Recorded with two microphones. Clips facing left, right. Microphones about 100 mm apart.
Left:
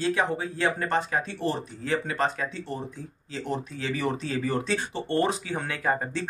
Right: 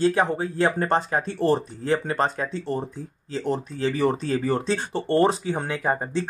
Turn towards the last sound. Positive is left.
turn(degrees=-25)  # may be behind; listen again after turning